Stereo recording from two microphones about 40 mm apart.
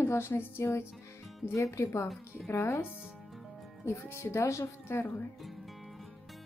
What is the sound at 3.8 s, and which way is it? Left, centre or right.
A woman's voice, left.